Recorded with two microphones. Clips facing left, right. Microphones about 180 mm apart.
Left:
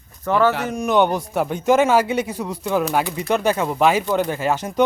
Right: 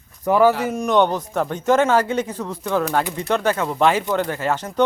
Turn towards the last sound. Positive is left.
turn(degrees=10)  # may be behind; listen again after turning